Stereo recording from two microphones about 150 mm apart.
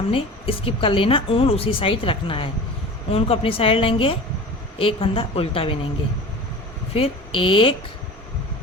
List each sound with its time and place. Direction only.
0.1 s a woman's voice: 40° left (ahead or behind)
6.9 s a woman's voice: 35° left (ahead or behind)